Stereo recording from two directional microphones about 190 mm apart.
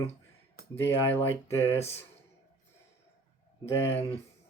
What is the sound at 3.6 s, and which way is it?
Speech, 15° left (ahead or behind).